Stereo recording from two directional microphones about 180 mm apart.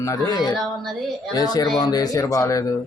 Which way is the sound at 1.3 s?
20° left (ahead or behind).